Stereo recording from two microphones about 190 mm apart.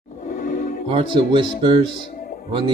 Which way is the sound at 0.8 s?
25° right (ahead or behind).